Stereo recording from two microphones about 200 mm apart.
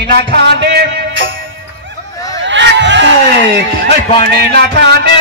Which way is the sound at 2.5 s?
60° right (ahead or behind).